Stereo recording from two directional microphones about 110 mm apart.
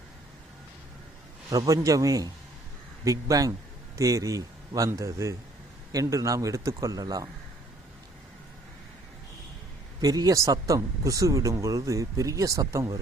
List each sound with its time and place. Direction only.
1.5 s speech: 30° right (ahead or behind)
10.0 s speech: 35° right (ahead or behind)